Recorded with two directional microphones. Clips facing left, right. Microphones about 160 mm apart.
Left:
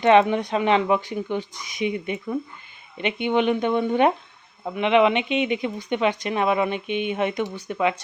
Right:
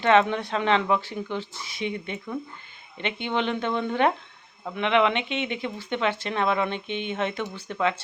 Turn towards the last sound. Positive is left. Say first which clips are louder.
# left 3 dB
turn(degrees=15)  # may be behind; listen again after turning